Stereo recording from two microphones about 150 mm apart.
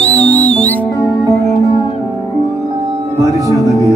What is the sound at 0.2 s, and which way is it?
Music, 10° left (ahead or behind).